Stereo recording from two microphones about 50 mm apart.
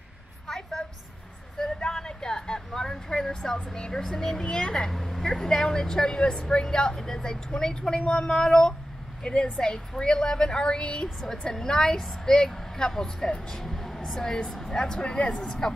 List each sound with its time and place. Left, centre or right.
0.5 s a woman's voice: centre